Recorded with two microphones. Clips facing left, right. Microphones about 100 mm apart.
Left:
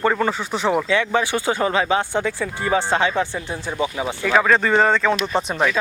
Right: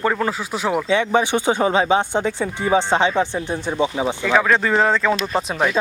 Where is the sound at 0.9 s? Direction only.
20° right (ahead or behind).